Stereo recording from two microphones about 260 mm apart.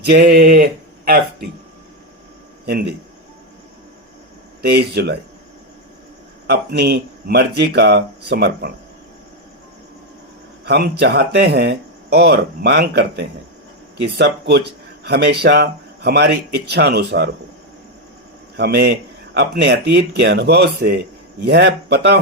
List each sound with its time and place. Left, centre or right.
0.0 s speech: right
2.6 s speech: right
4.6 s speech: right
6.5 s speech: right
10.7 s speech: right
18.5 s speech: right